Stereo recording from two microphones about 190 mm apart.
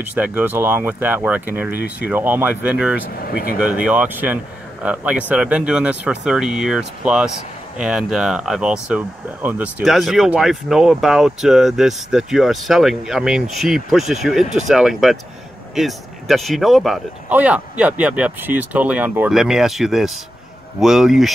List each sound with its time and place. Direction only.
0.1 s speech: 10° right (ahead or behind)
3.2 s speech: 55° left (ahead or behind)
3.5 s speech: 5° right (ahead or behind)